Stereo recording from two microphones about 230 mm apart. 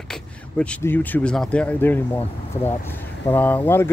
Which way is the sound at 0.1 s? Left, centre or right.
Centre.